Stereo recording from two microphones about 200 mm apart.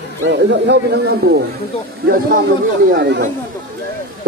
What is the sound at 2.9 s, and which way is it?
Speech, 60° right (ahead or behind).